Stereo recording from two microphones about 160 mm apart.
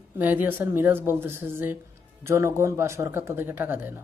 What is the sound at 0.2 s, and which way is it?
Speech, 10° right (ahead or behind).